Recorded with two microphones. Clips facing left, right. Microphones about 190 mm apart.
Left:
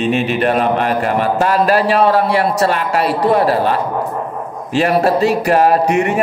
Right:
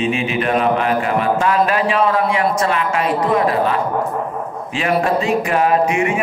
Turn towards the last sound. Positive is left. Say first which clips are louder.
# left 2 dB
turn(degrees=40)  # may be behind; listen again after turning